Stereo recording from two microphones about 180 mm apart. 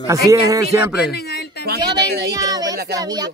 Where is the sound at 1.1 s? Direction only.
60° left (ahead or behind).